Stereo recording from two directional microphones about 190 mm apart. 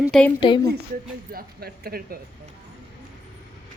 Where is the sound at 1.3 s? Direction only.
50° right (ahead or behind).